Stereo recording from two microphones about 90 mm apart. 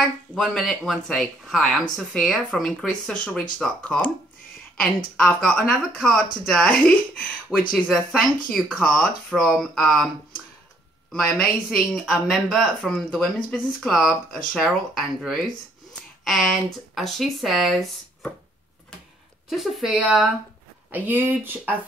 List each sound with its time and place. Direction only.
0.3 s a woman's voice: 5° left (ahead or behind)
4.7 s speech: 5° left (ahead or behind)
7.9 s a woman's voice: centre (ahead or behind)
11.1 s a woman's voice: 5° left (ahead or behind)
19.5 s a woman's voice: centre (ahead or behind)
19.9 s speech: 10° right (ahead or behind)